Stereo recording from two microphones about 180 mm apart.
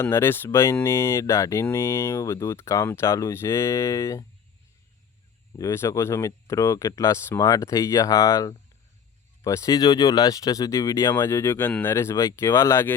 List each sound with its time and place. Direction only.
0.0 s speech: 15° left (ahead or behind)
5.5 s speech: 15° left (ahead or behind)